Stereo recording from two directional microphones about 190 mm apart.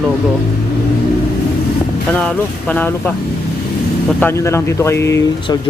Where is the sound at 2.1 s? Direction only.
5° left (ahead or behind).